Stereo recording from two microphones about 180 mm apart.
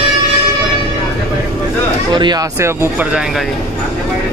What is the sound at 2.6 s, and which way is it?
Speech, 10° right (ahead or behind).